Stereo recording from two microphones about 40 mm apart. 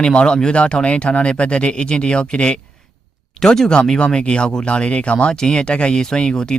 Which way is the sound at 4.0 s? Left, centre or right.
Left.